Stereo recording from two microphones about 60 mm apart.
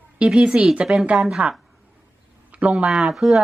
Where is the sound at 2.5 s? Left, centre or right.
Centre.